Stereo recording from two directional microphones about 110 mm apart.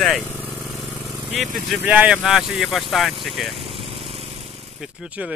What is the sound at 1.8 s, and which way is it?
Speech, 10° right (ahead or behind).